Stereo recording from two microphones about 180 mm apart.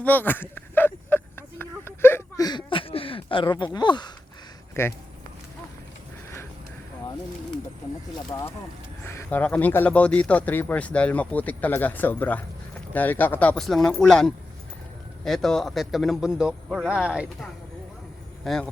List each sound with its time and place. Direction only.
0.0 s a sound: 10° left (ahead or behind)
4.7 s speech: 15° left (ahead or behind)
8.3 s a man's voice: 15° left (ahead or behind)